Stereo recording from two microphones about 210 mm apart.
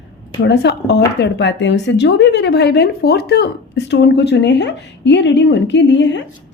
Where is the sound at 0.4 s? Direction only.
55° left (ahead or behind).